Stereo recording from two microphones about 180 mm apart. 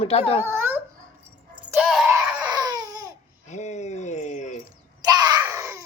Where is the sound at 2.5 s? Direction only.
20° right (ahead or behind).